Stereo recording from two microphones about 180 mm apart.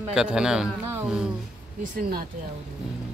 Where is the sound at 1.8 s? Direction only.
55° right (ahead or behind).